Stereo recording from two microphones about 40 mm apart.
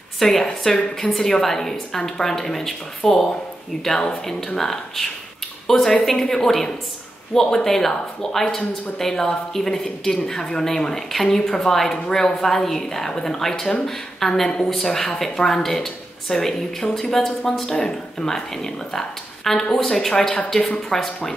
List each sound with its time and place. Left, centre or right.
0.4 s a woman's voice: centre
6.4 s speech: centre